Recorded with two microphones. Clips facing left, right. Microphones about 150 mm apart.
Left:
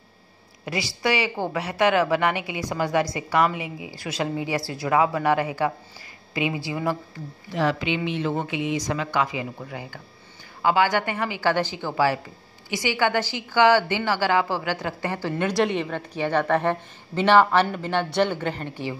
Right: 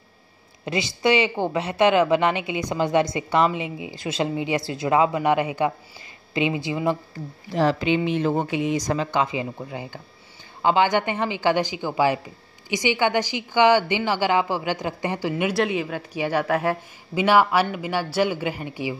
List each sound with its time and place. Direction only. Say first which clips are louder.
0.7 s a woman's voice: right 4 dB; 20° right (ahead or behind)
7.5 s a woman's voice: right 4 dB; 35° right (ahead or behind); by 15.5 s 15° right (ahead or behind)
15.5 s a woman's voice: even; centre (ahead or behind)